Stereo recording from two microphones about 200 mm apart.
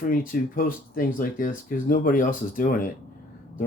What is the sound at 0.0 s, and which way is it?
Speech, 45° left (ahead or behind).